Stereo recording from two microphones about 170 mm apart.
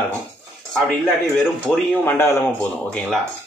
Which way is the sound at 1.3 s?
5° left (ahead or behind).